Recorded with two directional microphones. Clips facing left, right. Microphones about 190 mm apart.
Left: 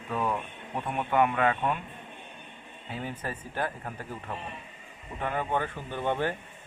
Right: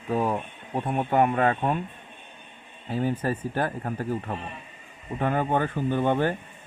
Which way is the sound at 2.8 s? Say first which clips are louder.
Right 9 dB; 35° right (ahead or behind).